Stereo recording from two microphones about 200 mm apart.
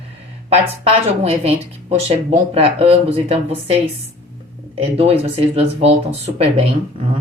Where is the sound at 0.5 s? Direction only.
30° right (ahead or behind).